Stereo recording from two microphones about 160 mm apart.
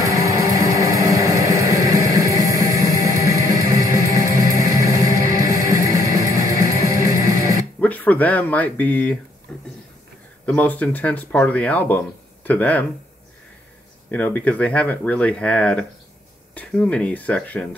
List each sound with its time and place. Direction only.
0.0 s music: 20° right (ahead or behind)
7.8 s speech: 10° left (ahead or behind)
9.5 s a sound: 5° left (ahead or behind)
10.4 s speech: 10° left (ahead or behind)
14.1 s speech: 10° left (ahead or behind)